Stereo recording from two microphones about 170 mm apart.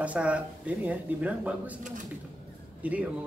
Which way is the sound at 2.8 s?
10° right (ahead or behind).